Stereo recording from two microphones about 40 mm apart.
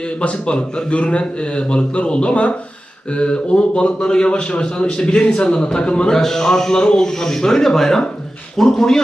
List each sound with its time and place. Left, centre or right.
0.2 s a man's voice: left
6.1 s speech: centre